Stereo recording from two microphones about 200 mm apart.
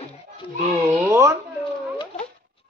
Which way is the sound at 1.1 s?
15° right (ahead or behind).